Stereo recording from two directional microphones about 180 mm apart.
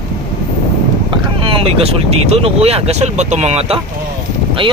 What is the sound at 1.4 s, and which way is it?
Speech, 30° right (ahead or behind).